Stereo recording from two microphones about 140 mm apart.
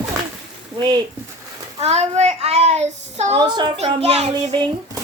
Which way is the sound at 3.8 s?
45° right (ahead or behind).